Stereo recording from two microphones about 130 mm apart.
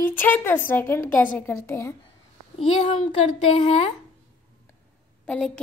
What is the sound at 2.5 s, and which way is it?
Speech, 60° left (ahead or behind).